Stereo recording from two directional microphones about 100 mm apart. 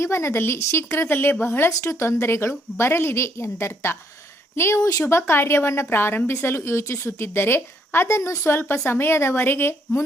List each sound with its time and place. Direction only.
0.0 s speech: 25° left (ahead or behind)